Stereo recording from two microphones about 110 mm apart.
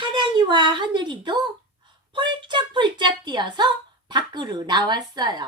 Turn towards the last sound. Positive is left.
turn(degrees=-40)  # may be behind; listen again after turning